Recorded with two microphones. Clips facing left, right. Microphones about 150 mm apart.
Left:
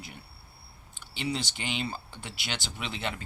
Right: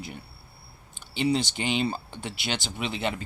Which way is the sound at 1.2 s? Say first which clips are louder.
Right 8 dB; 20° right (ahead or behind).